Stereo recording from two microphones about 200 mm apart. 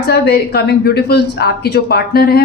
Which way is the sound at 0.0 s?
55° left (ahead or behind).